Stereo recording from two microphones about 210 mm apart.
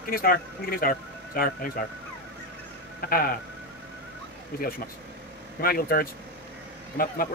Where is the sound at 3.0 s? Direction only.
45° left (ahead or behind).